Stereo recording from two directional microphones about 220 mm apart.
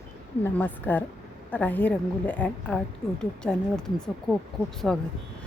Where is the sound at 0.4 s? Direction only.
10° left (ahead or behind).